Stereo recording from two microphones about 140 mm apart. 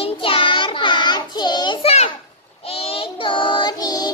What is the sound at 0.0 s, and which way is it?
Child singing, 40° left (ahead or behind).